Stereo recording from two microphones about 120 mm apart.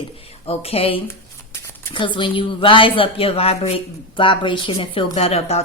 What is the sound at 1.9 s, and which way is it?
A woman's voice, 40° left (ahead or behind).